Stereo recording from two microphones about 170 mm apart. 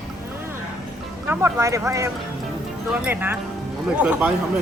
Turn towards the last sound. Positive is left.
turn(degrees=-5)  # may be behind; listen again after turning